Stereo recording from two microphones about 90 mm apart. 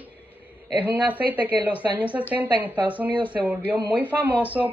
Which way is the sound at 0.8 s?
15° right (ahead or behind).